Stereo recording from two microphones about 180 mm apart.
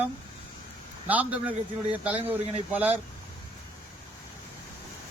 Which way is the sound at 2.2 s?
35° right (ahead or behind).